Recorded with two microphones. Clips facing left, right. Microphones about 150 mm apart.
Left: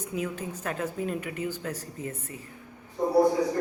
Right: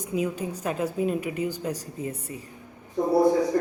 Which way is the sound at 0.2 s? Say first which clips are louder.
Right 5 dB; 15° right (ahead or behind).